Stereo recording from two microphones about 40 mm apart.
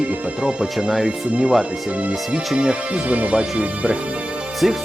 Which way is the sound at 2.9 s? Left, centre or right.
Right.